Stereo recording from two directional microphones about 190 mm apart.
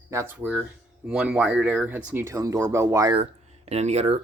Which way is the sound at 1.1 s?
5° right (ahead or behind).